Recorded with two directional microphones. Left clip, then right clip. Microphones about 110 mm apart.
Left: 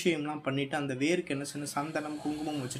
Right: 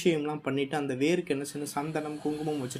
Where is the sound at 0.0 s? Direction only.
30° right (ahead or behind).